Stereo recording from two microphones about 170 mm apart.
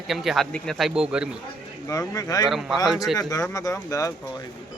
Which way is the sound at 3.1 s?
20° left (ahead or behind).